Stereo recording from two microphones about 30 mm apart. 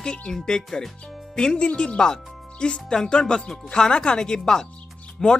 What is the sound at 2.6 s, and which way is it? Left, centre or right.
Speech, left.